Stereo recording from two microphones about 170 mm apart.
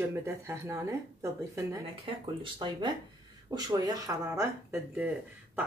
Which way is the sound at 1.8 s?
30° right (ahead or behind).